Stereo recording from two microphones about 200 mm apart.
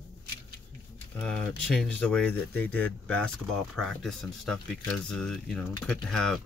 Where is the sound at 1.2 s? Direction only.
5° left (ahead or behind).